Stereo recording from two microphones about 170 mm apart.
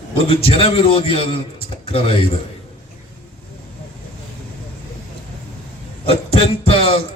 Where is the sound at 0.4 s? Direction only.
35° left (ahead or behind).